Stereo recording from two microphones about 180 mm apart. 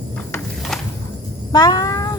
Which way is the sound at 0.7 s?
Centre (ahead or behind).